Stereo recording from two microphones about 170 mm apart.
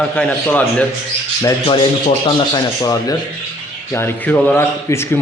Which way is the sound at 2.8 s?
20° left (ahead or behind).